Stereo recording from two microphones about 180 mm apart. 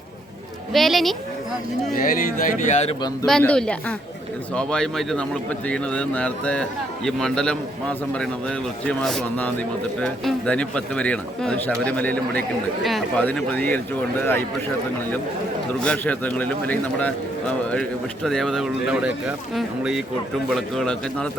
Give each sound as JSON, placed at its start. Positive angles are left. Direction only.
{"t": 0.7, "sound": "a man's voice", "side_deg": 0}
{"t": 1.9, "sound": "speech", "side_deg": 50}
{"t": 3.2, "sound": "a man's voice", "side_deg": 5}
{"t": 15.8, "sound": "a man's voice", "side_deg": 5}